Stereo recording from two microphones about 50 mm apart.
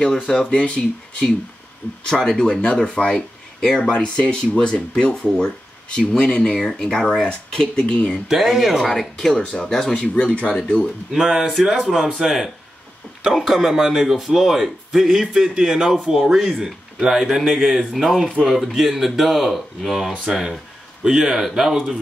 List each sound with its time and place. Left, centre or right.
0.0 s speech: centre
0.5 s speech: left
2.0 s speech: centre
3.2 s speech: centre
3.9 s speech: left
8.3 s speech: centre
9.9 s speech: left
11.1 s speech: centre
13.6 s speech: centre